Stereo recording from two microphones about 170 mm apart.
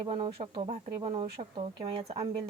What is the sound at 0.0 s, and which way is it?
Speech, 30° right (ahead or behind).